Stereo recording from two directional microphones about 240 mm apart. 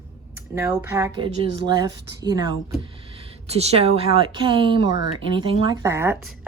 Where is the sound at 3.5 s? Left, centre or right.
Right.